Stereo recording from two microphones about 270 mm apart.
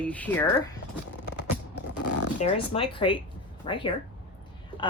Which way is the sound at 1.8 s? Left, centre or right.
Left.